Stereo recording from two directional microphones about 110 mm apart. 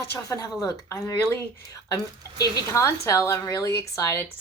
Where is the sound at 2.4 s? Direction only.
25° left (ahead or behind).